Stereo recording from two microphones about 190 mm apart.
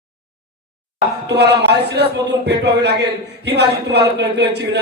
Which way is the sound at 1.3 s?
60° right (ahead or behind).